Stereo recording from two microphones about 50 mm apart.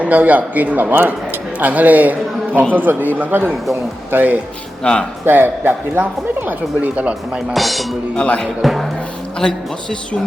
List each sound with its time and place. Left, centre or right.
0.0 s a man's voice: right
4.8 s speech: centre
5.2 s speech: right
7.5 s speech: centre
8.1 s speech: centre
8.6 s speech: centre